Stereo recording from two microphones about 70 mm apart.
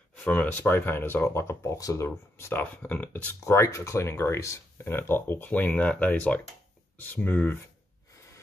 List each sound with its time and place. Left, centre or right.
0.1 s speech: left
2.6 s speech: left
3.4 s speech: left